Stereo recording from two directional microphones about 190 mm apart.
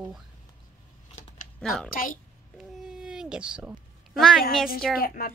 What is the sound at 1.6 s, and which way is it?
Speech, centre (ahead or behind).